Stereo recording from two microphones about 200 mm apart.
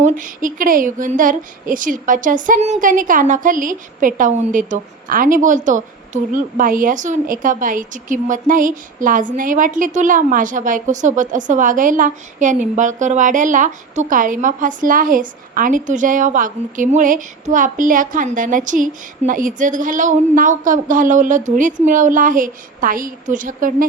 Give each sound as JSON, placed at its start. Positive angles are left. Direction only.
{"t": 0.0, "sound": "speech", "side_deg": -40}